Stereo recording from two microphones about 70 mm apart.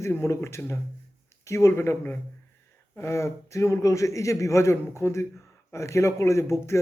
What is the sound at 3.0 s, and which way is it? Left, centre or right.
A man's voice, left.